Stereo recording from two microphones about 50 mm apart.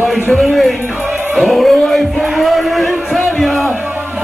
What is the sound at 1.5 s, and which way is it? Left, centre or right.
Music, centre.